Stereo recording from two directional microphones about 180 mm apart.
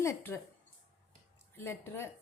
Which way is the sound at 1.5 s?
10° left (ahead or behind).